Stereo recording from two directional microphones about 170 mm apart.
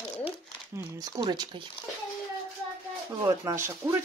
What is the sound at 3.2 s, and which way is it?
Speech, 20° right (ahead or behind).